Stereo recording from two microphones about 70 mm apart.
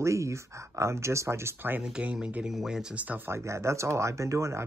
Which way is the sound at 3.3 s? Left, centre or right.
Right.